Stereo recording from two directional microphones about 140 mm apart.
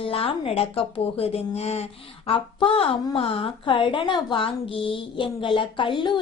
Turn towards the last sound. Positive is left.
turn(degrees=35)  # may be behind; listen again after turning